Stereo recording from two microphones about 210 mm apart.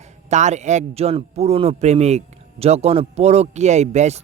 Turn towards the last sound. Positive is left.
turn(degrees=-35)  # may be behind; listen again after turning